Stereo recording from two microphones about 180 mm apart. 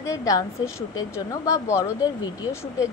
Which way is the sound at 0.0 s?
20° left (ahead or behind).